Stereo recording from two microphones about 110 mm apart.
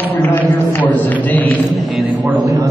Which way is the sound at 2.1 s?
15° right (ahead or behind).